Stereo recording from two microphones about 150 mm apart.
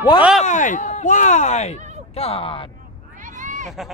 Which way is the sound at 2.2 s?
40° left (ahead or behind).